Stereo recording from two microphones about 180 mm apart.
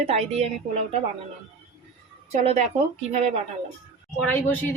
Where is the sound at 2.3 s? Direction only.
35° right (ahead or behind).